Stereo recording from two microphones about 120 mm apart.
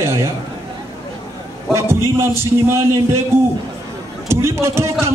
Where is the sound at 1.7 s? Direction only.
20° right (ahead or behind).